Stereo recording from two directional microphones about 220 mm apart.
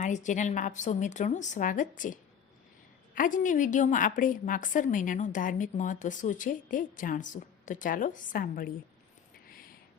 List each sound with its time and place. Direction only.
0.0 s a woman's voice: 35° left (ahead or behind)
3.2 s a woman's voice: 35° left (ahead or behind)